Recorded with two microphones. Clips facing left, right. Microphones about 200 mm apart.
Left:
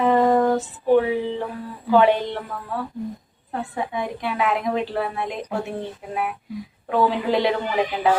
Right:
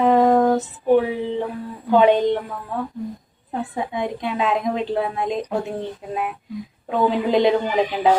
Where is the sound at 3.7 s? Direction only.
20° right (ahead or behind).